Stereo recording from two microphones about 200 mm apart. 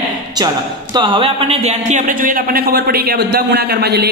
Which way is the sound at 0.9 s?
20° right (ahead or behind).